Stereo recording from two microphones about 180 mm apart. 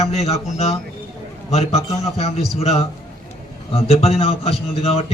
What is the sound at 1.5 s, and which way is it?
A man's voice, 35° left (ahead or behind).